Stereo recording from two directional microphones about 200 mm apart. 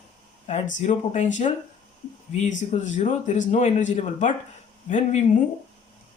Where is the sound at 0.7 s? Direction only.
35° left (ahead or behind).